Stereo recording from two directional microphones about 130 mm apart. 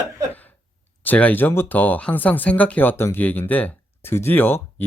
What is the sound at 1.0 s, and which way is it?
Speech, 10° left (ahead or behind).